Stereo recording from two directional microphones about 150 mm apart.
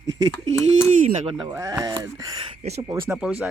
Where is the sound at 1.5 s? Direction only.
20° right (ahead or behind).